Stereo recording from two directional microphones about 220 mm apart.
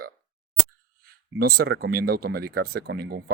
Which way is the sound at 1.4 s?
45° right (ahead or behind).